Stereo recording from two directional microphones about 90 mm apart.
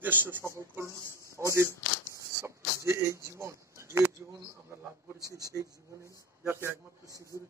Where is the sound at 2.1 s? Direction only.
30° right (ahead or behind).